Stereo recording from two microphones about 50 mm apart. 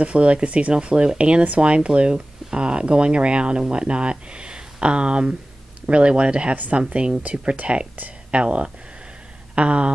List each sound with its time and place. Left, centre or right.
0.0 s speech: right
6.5 s speech: right
6.8 s speech: centre